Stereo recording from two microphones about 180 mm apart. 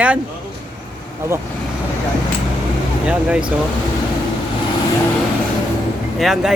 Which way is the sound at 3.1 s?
5° right (ahead or behind).